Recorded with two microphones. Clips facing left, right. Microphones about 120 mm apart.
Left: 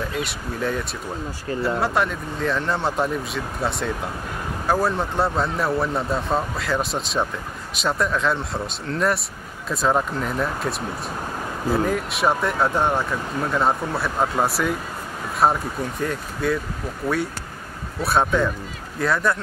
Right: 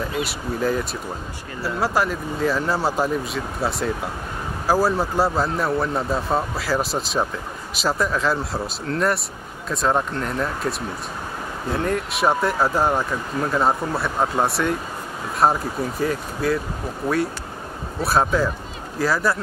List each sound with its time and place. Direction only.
0.1 s speech: centre (ahead or behind)
17.0 s speech: 25° right (ahead or behind)
18.0 s speech: centre (ahead or behind)